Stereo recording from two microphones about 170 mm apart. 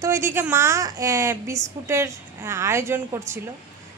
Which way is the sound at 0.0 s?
15° right (ahead or behind).